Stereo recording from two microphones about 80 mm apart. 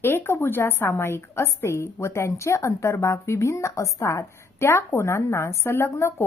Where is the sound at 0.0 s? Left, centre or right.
Left.